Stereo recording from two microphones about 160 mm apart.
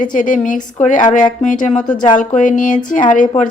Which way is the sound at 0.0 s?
55° left (ahead or behind).